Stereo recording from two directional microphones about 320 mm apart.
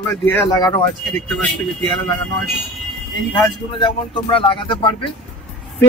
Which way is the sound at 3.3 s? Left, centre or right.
Centre.